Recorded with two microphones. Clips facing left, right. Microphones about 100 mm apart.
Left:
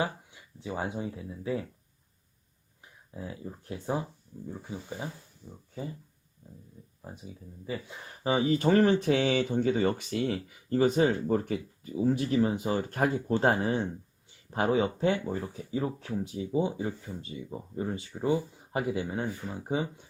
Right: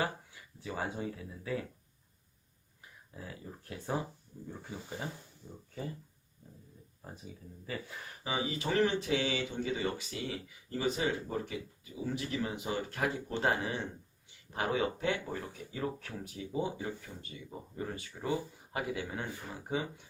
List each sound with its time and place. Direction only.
0.0 s speech: 20° left (ahead or behind)
3.2 s speech: 20° left (ahead or behind)
7.0 s speech: 15° left (ahead or behind)
8.2 s speech: 40° left (ahead or behind); by 20.1 s 25° left (ahead or behind)